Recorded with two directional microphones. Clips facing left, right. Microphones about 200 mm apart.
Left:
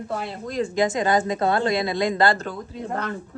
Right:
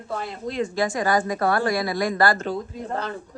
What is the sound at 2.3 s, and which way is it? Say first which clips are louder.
Speech: right 4 dB; 45° left (ahead or behind).